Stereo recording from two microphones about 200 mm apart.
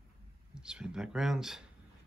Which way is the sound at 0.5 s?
5° right (ahead or behind).